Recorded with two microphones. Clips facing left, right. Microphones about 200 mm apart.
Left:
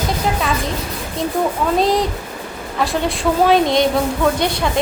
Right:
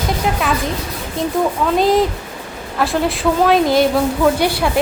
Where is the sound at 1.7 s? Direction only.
Centre (ahead or behind).